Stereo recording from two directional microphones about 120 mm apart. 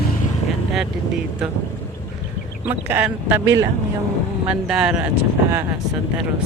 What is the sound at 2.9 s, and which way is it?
Speech, 15° right (ahead or behind).